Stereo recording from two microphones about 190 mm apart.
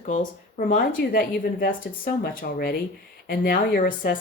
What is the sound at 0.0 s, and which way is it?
Speech, 45° left (ahead or behind).